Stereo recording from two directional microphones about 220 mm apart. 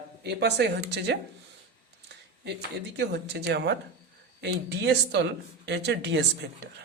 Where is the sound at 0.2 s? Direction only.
50° right (ahead or behind).